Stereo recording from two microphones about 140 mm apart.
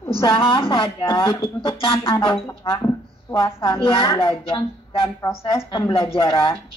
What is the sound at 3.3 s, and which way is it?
Speech, 40° left (ahead or behind).